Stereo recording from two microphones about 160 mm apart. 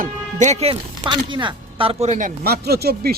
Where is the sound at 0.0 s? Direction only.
45° right (ahead or behind).